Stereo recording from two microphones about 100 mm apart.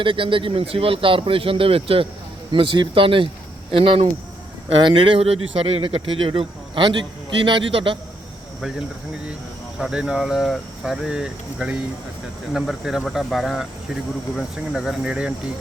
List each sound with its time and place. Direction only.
0.0 s speech: 55° right (ahead or behind)
2.5 s speech: 55° right (ahead or behind)
9.7 s speech: 5° right (ahead or behind)